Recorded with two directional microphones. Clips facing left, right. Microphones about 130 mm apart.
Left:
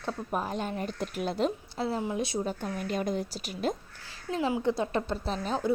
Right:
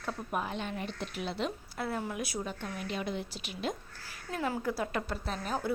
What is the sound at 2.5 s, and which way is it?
Speech, 40° left (ahead or behind).